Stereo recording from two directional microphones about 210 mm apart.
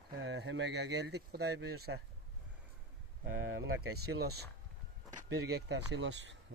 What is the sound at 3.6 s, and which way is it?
Speech, 55° right (ahead or behind).